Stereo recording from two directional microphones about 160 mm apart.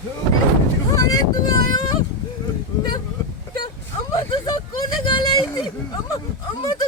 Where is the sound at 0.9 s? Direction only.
20° left (ahead or behind).